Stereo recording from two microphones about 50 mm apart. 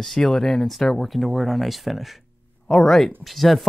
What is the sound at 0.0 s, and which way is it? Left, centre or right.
Speech, centre.